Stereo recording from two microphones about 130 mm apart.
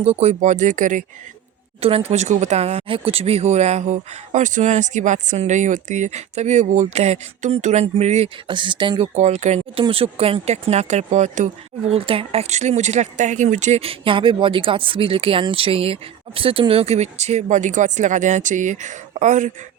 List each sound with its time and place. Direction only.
0.0 s speech: 55° right (ahead or behind); by 1.0 s 80° right
1.8 s speech: 50° right (ahead or behind)
8.4 s speech: 40° right (ahead or behind)
9.1 s speech: 60° right (ahead or behind)
9.8 s speech: 45° right (ahead or behind); by 11.4 s 65° right (ahead or behind)
11.9 s speech: 45° right (ahead or behind); by 19.5 s 70° right (ahead or behind)